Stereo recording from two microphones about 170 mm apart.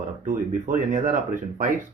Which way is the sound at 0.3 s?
50° right (ahead or behind).